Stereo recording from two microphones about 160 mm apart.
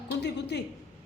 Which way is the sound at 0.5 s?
90° left.